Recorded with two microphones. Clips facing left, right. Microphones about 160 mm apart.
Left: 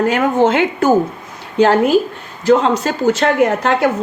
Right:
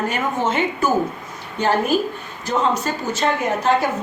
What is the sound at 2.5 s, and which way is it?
A woman's voice, 80° left.